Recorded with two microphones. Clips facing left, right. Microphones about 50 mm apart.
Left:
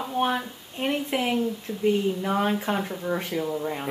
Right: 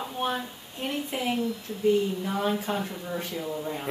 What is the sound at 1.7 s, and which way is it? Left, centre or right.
Speech, left.